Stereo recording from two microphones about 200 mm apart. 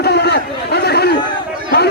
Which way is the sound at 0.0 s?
55° left (ahead or behind).